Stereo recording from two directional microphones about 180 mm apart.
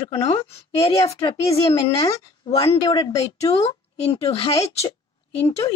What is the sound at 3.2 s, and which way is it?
Speech, 35° left (ahead or behind).